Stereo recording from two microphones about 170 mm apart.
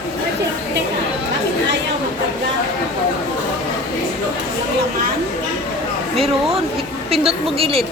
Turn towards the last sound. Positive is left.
turn(degrees=-35)  # may be behind; listen again after turning